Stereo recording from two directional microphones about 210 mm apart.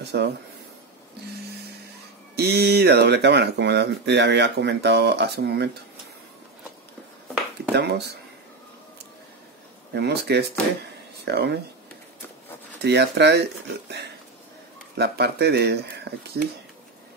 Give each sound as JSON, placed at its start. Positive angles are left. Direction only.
{"t": 0.0, "sound": "speech", "side_deg": -50}
{"t": 2.3, "sound": "speech", "side_deg": -50}
{"t": 7.7, "sound": "speech", "side_deg": -50}
{"t": 9.9, "sound": "speech", "side_deg": -50}
{"t": 12.8, "sound": "speech", "side_deg": -50}